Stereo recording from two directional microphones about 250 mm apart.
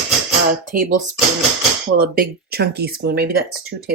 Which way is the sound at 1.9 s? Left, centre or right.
Right.